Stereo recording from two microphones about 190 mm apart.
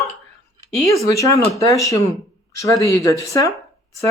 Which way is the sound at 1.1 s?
15° left (ahead or behind).